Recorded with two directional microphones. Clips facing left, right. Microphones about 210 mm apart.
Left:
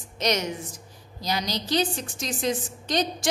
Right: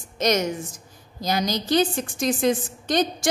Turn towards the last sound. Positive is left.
turn(degrees=-55)  # may be behind; listen again after turning